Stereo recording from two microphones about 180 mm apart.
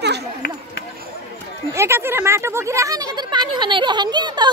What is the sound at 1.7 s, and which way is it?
Speech, 15° right (ahead or behind).